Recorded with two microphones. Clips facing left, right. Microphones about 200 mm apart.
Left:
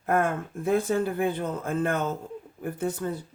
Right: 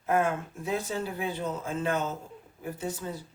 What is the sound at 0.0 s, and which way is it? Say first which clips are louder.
Speech: left 2 dB; 55° left (ahead or behind).